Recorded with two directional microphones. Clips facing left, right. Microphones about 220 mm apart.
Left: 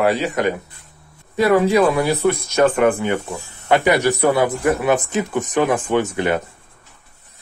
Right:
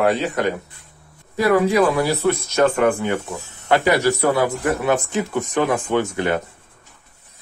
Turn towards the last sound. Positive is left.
turn(degrees=15)  # may be behind; listen again after turning